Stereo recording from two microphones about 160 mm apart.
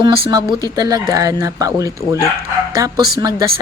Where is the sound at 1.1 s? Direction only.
20° right (ahead or behind).